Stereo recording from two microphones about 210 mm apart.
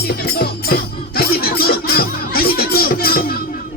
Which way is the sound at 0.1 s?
45° left (ahead or behind).